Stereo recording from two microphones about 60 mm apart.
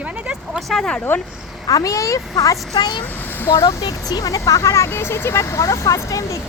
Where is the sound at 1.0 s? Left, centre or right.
Left.